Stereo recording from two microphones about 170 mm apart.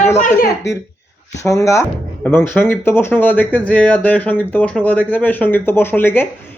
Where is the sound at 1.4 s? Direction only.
20° left (ahead or behind).